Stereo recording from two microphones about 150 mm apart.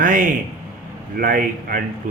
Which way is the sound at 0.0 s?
65° right (ahead or behind).